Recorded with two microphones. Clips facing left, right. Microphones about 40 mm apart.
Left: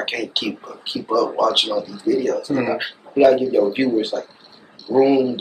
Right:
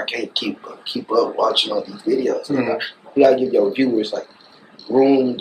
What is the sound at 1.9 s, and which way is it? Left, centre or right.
Speech, centre.